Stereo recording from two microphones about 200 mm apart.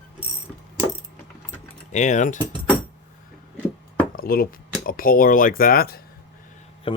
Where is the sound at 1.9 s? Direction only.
35° left (ahead or behind).